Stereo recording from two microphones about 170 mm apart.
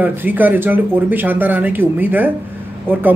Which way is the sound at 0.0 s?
10° right (ahead or behind).